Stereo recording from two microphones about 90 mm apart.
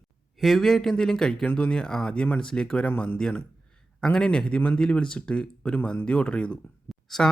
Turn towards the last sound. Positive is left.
turn(degrees=5)  # may be behind; listen again after turning